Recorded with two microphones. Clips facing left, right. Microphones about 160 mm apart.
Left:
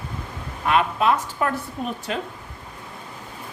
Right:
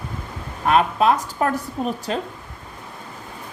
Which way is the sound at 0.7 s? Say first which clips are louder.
Right 3 dB; 40° right (ahead or behind).